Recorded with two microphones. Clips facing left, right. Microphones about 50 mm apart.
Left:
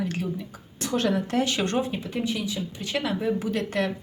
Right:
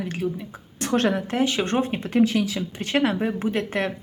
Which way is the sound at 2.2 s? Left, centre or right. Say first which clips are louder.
Right 5 dB; right.